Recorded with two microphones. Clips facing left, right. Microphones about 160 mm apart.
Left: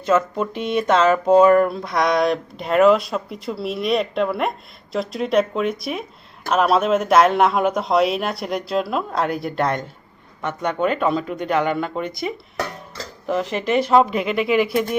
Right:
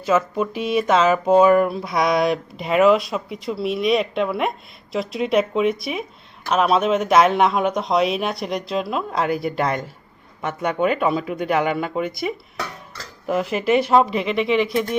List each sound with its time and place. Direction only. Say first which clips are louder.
0.0 s speech: left 1 dB; 5° right (ahead or behind)